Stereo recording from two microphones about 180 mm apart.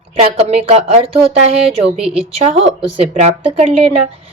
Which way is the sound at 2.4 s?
35° right (ahead or behind).